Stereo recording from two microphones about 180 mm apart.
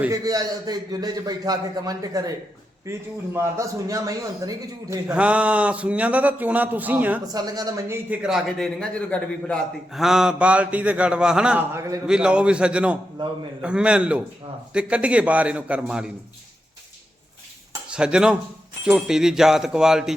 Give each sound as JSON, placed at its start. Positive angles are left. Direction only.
{"t": 0.1, "sound": "a man's voice", "side_deg": -20}
{"t": 5.1, "sound": "a man's voice", "side_deg": -5}
{"t": 7.3, "sound": "a man's voice", "side_deg": -20}
{"t": 12.0, "sound": "a man's voice", "side_deg": -5}
{"t": 17.8, "sound": "speech", "side_deg": -5}